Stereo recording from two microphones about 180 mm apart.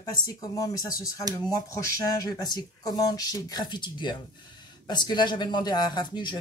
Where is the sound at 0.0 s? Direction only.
20° left (ahead or behind).